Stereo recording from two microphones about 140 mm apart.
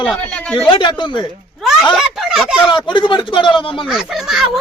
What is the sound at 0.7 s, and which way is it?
Speech, 35° left (ahead or behind).